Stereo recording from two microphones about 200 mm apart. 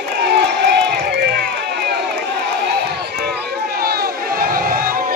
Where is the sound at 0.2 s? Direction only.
55° right (ahead or behind).